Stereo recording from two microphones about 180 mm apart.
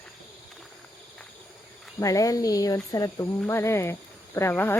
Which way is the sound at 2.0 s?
20° left (ahead or behind).